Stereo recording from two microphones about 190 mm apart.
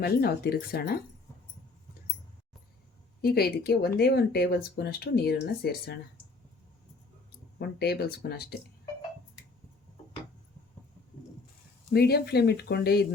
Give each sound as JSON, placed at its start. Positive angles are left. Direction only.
{"t": 0.0, "sound": "speech", "side_deg": 55}
{"t": 3.2, "sound": "speech", "side_deg": 55}
{"t": 7.6, "sound": "speech", "side_deg": 60}
{"t": 11.9, "sound": "speech", "side_deg": 55}